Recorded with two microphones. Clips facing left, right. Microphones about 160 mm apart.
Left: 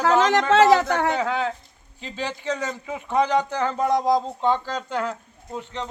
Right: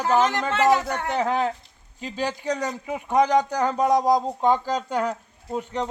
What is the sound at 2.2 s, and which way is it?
Speech, 15° right (ahead or behind).